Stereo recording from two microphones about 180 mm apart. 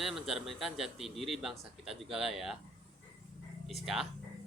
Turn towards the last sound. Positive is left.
turn(degrees=0)  # may be behind; listen again after turning